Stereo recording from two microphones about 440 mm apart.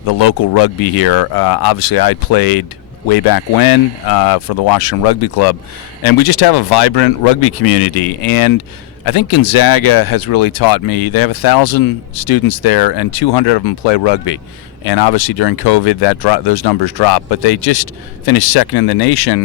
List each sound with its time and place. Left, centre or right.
0.1 s speech: left
8.3 s speech: left